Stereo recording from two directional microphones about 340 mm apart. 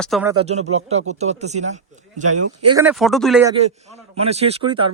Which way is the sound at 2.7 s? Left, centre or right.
Centre.